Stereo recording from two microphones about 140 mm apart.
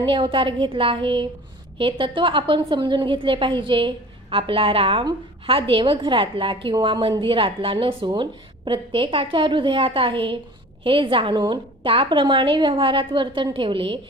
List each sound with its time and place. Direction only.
0.0 s a woman's voice: 35° right (ahead or behind)